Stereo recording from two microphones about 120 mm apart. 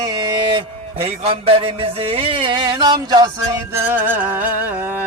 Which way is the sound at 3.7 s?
20° right (ahead or behind).